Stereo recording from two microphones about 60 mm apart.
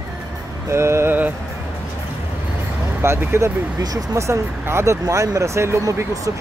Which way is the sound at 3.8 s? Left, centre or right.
Right.